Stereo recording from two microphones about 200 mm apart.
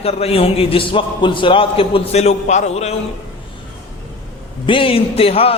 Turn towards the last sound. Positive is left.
turn(degrees=30)  # may be behind; listen again after turning